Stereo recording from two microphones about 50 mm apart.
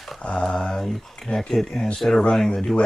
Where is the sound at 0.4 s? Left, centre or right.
Centre.